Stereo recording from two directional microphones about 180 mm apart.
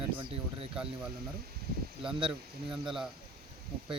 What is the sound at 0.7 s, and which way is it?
Speech, 5° right (ahead or behind).